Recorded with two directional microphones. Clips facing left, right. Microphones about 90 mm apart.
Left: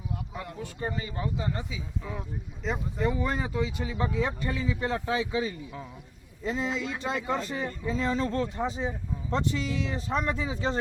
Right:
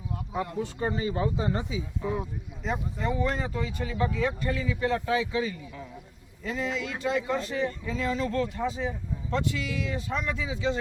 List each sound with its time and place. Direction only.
0.3 s speech: 25° right (ahead or behind)
2.6 s speech: 5° left (ahead or behind); by 10.8 s 40° left (ahead or behind)